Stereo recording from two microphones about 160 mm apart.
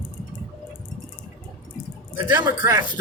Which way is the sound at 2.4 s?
25° right (ahead or behind).